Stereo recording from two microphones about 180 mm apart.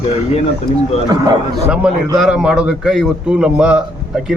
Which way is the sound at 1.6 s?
5° right (ahead or behind).